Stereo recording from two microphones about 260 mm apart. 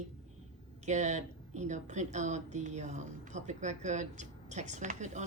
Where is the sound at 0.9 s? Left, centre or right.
Right.